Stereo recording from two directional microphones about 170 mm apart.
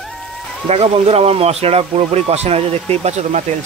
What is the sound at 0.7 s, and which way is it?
Speech, 35° right (ahead or behind).